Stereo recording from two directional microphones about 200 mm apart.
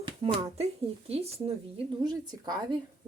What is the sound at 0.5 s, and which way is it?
Speech, 30° right (ahead or behind).